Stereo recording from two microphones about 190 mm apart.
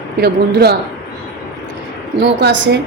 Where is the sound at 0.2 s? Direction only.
55° right (ahead or behind).